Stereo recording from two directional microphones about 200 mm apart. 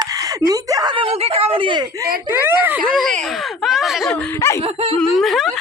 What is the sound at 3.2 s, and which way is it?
Speech, centre (ahead or behind).